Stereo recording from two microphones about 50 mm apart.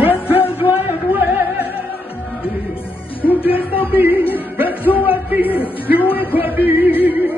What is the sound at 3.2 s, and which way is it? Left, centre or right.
Music, left.